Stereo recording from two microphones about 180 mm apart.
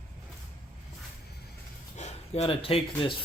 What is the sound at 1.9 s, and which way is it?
Speech, 35° left (ahead or behind).